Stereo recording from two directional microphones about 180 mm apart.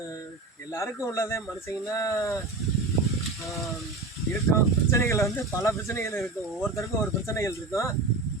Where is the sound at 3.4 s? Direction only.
Centre (ahead or behind).